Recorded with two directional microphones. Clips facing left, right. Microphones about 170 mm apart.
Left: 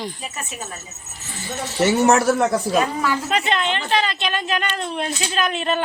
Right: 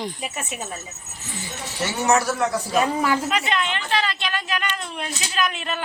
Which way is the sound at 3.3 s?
30° left (ahead or behind).